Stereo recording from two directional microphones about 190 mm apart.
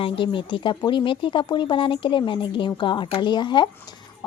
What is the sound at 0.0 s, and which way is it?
Speech, 25° left (ahead or behind).